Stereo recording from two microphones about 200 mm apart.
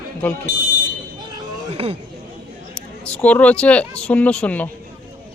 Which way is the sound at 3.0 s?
5° left (ahead or behind).